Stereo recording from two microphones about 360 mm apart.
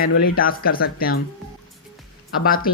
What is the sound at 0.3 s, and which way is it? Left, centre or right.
Speech, left.